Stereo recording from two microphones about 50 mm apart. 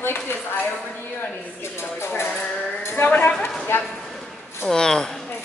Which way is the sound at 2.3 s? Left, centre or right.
Centre.